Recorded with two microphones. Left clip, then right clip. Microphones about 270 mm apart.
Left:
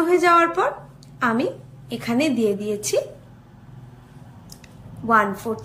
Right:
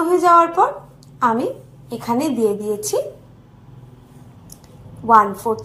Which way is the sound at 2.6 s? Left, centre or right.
Centre.